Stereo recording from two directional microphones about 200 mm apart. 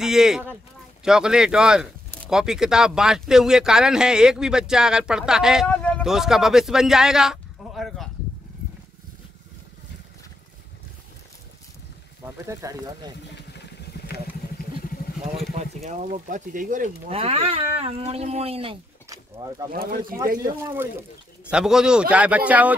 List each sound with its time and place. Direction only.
0.0 s speech: 5° right (ahead or behind)
12.4 s speech: 20° right (ahead or behind)
15.3 s speech: 35° right (ahead or behind)
17.1 s speech: 30° right (ahead or behind)
19.7 s speech: 45° right (ahead or behind)
21.5 s speech: 5° right (ahead or behind)